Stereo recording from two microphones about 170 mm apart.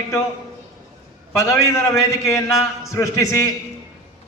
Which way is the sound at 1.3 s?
15° left (ahead or behind).